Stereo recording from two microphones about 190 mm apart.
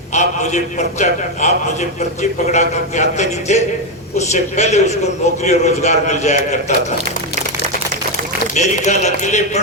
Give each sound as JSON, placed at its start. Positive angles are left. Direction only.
{"t": 0.1, "sound": "a man's voice", "side_deg": 40}
{"t": 8.5, "sound": "a man's voice", "side_deg": 40}